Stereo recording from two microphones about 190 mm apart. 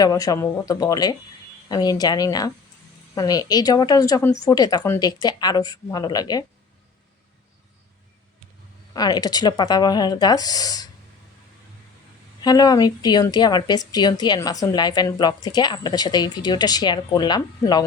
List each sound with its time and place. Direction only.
0.0 s speech: 20° left (ahead or behind)
8.9 s speech: 20° left (ahead or behind)
12.4 s speech: 20° left (ahead or behind)